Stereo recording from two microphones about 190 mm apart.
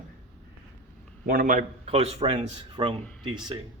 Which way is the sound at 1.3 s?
45° right (ahead or behind).